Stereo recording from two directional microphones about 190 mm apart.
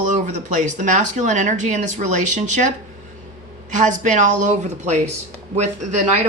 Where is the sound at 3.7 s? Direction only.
40° right (ahead or behind).